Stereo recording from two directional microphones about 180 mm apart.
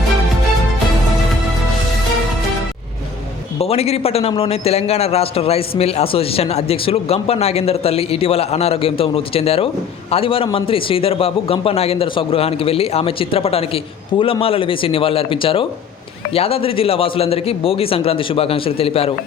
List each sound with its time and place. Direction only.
3.6 s a man's voice: 35° left (ahead or behind)